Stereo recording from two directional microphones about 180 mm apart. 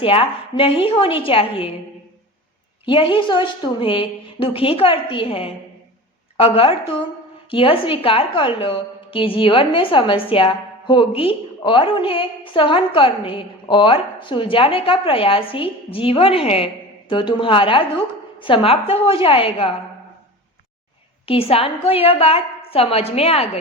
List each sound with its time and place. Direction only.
0.0 s a woman's voice: 30° left (ahead or behind)
2.8 s a woman's voice: 30° left (ahead or behind)
21.2 s a woman's voice: 30° left (ahead or behind)